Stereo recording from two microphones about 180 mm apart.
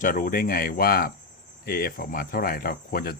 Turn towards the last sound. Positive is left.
turn(degrees=55)  # may be behind; listen again after turning